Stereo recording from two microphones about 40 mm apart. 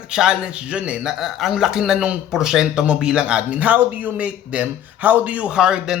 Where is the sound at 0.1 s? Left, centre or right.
Centre.